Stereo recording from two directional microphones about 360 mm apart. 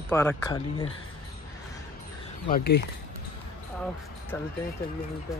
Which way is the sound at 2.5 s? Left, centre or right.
Left.